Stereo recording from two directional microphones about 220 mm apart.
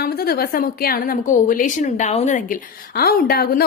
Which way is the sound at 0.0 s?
45° left (ahead or behind).